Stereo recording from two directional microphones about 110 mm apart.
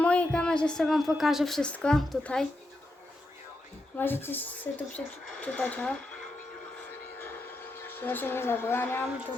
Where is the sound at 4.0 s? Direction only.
20° left (ahead or behind).